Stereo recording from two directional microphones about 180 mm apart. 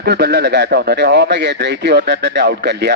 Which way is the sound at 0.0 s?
65° right (ahead or behind).